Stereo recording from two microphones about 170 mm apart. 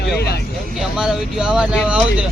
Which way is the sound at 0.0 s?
70° left (ahead or behind).